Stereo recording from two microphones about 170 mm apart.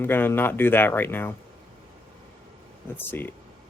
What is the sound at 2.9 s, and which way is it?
Speech, 10° left (ahead or behind).